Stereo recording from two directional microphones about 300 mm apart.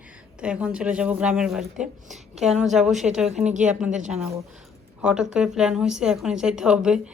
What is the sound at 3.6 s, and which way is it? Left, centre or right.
A woman's voice, centre.